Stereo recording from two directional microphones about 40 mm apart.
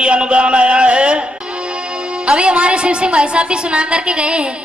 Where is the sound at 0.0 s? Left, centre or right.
Right.